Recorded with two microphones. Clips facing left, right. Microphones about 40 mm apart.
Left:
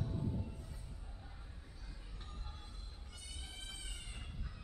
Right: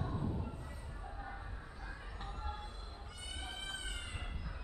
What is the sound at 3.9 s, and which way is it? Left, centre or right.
Train, right.